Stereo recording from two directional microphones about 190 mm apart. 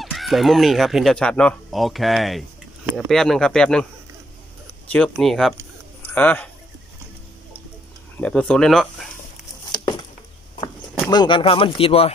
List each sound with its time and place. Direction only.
0.0 s speech: centre (ahead or behind)
4.9 s speech: 5° left (ahead or behind)
8.2 s speech: 5° left (ahead or behind)
9.7 s a sound: 25° left (ahead or behind)
11.1 s speech: 25° left (ahead or behind)